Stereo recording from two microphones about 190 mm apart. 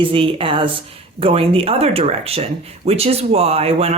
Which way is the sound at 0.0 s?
30° right (ahead or behind).